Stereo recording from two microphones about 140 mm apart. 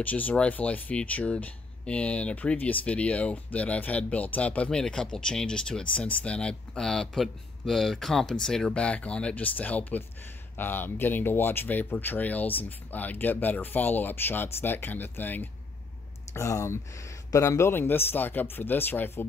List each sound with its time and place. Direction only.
0.0 s speech: 10° left (ahead or behind)